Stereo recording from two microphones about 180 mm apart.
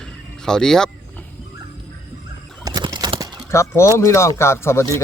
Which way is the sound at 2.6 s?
20° right (ahead or behind).